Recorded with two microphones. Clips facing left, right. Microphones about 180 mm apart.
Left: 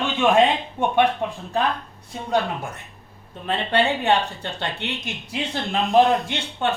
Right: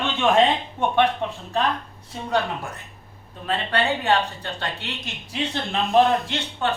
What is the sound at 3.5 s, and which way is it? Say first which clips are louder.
Speech: left 2 dB; 25° left (ahead or behind).